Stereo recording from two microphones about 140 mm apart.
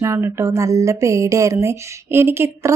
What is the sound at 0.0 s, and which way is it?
Speech, 20° right (ahead or behind).